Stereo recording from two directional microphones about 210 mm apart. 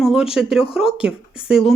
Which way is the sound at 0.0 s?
Centre (ahead or behind).